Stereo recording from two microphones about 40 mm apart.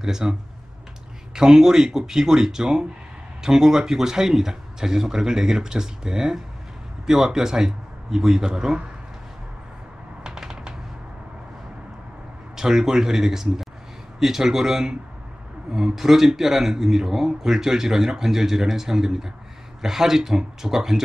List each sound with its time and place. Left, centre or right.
0.0 s a man's voice: centre
10.2 s typewriter: centre
12.5 s a man's voice: centre